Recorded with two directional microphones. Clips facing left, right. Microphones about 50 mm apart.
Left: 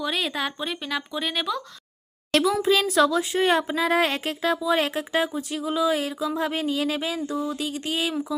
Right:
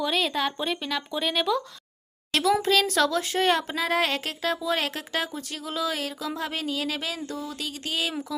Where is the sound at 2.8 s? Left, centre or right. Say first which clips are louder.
Left 3 dB; centre.